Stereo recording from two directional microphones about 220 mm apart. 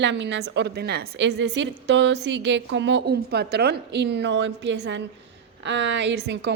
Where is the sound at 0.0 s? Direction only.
55° right (ahead or behind).